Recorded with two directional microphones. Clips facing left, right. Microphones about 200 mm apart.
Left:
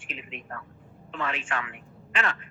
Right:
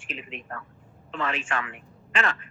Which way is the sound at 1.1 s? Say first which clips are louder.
Right 2 dB; 45° right (ahead or behind).